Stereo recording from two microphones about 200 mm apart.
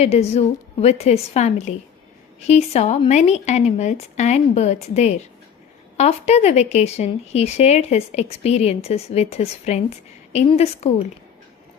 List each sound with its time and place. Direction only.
0.0 s speech: 30° left (ahead or behind)